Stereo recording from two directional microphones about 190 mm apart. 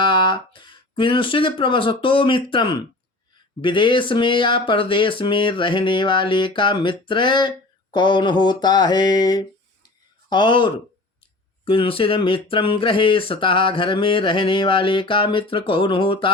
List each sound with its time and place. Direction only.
0.0 s speech: 25° left (ahead or behind)
7.9 s mantra: 25° left (ahead or behind)
11.6 s speech: 30° left (ahead or behind)